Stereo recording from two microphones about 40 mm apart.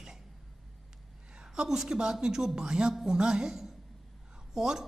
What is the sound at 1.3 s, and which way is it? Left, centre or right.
A woman's voice, centre.